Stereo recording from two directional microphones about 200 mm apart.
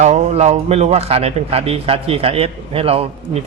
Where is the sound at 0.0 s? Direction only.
35° right (ahead or behind).